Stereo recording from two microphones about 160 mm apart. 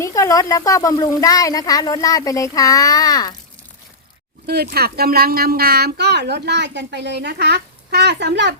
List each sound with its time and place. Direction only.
0.0 s a woman's voice: 20° left (ahead or behind)
4.4 s speech: 80° right